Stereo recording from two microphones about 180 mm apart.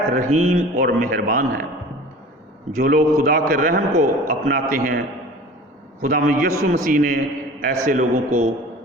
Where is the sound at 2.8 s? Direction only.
60° right (ahead or behind).